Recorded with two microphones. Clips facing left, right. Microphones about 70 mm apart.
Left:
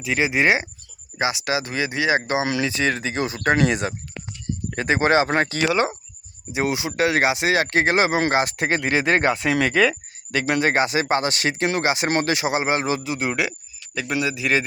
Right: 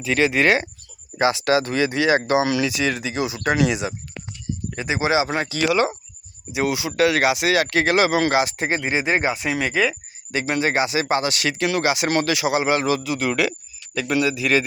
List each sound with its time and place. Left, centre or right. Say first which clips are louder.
0.0 s speech: right 2 dB; centre; by 5.6 s left
5.6 s speech: right 1 dB; left
8.4 s speech: left 1 dB; left
10.3 s speech: left 1 dB; left